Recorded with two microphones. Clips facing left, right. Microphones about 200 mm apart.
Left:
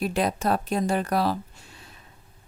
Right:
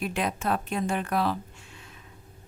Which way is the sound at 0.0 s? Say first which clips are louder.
Left 4 dB; 35° left (ahead or behind).